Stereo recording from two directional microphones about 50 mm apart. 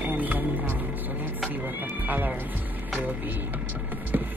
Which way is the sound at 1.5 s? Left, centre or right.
Right.